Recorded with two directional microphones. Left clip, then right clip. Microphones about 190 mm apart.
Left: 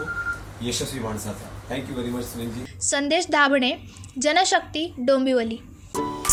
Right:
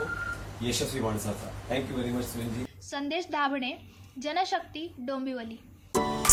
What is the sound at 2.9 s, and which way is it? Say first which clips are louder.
A woman's voice: left 11 dB; 45° left (ahead or behind).